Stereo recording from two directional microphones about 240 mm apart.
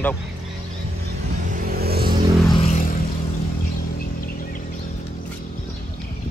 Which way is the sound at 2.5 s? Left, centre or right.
Left.